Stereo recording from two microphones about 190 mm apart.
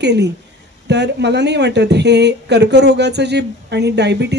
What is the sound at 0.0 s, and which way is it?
A woman's voice, 65° right (ahead or behind).